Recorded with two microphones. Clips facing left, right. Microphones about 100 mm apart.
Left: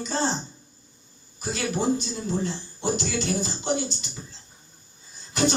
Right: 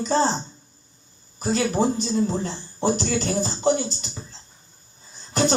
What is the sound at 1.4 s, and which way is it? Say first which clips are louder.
Speech: right 5 dB; 40° right (ahead or behind).